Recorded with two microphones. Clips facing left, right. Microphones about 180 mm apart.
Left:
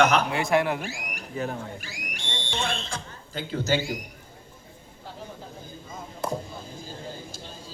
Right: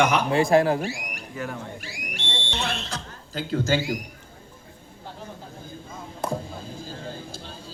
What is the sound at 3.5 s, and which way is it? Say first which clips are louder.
Speech: right 2 dB; 50° right (ahead or behind).